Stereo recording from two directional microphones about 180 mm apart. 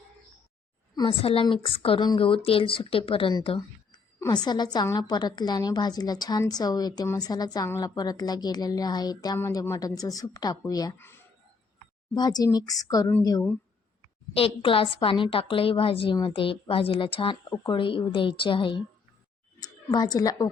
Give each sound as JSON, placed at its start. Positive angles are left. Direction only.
{"t": 0.9, "sound": "a woman's voice", "side_deg": 25}
{"t": 14.3, "sound": "a woman's voice", "side_deg": 30}